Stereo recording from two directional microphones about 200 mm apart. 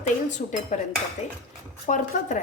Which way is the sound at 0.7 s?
35° left (ahead or behind).